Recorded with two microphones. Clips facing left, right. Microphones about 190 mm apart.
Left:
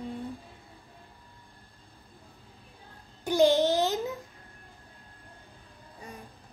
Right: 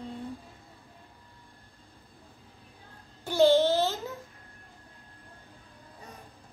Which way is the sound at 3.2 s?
15° left (ahead or behind).